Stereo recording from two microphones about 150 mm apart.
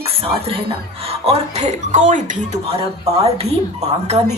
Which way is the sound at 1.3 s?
50° right (ahead or behind).